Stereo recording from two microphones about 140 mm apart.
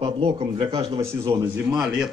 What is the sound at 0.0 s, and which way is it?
Speech, 40° right (ahead or behind).